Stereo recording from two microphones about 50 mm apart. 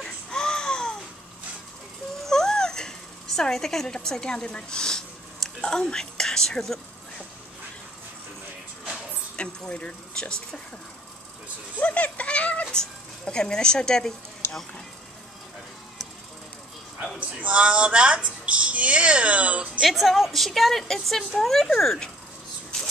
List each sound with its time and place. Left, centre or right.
0.0 s baby cry: centre
2.2 s a sound: centre
9.4 s speech: left
11.8 s a sound: left
12.7 s speech: centre
17.2 s speech: right
19.8 s a woman's voice: centre